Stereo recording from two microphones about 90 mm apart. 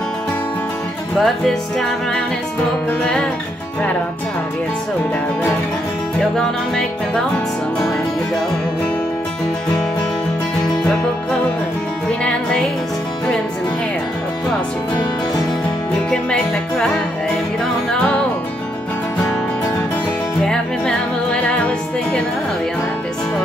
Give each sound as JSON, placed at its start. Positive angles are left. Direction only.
{"t": 1.1, "sound": "music", "side_deg": 5}
{"t": 2.9, "sound": "music", "side_deg": 10}
{"t": 6.1, "sound": "music", "side_deg": 5}
{"t": 12.1, "sound": "music", "side_deg": 10}
{"t": 16.1, "sound": "music", "side_deg": 10}
{"t": 17.9, "sound": "music", "side_deg": 15}
{"t": 20.4, "sound": "music", "side_deg": 10}